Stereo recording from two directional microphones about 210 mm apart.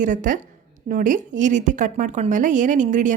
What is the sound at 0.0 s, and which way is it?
A woman's voice, 40° right (ahead or behind).